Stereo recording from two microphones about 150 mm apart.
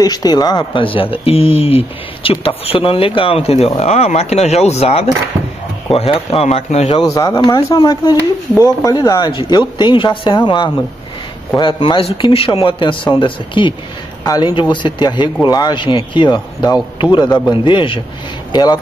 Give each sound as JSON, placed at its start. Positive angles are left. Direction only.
{"t": 0.0, "sound": "speech", "side_deg": 25}
{"t": 7.0, "sound": "speech", "side_deg": 20}